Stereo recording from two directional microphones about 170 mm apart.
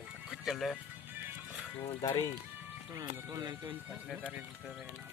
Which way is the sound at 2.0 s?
20° left (ahead or behind).